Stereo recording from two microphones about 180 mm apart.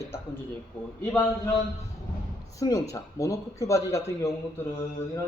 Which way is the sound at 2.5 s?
20° left (ahead or behind).